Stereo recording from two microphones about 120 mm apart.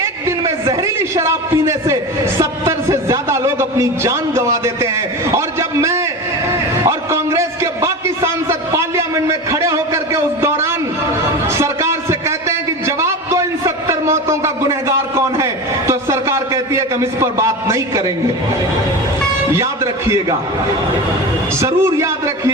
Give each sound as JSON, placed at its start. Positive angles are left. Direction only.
{"t": 0.0, "sound": "a sound", "side_deg": -25}
{"t": 15.9, "sound": "a man's voice", "side_deg": -25}
{"t": 19.5, "sound": "a man's voice", "side_deg": -25}
{"t": 21.6, "sound": "a man's voice", "side_deg": -25}